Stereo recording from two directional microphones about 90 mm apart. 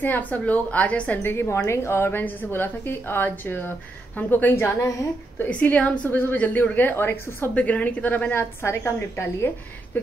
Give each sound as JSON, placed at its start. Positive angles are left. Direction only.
{"t": 0.0, "sound": "a woman's voice", "side_deg": 20}
{"t": 7.5, "sound": "a woman's voice", "side_deg": 15}
{"t": 9.9, "sound": "a sound", "side_deg": 25}